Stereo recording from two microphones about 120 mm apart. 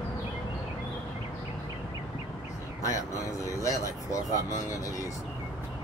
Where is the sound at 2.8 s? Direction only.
25° left (ahead or behind).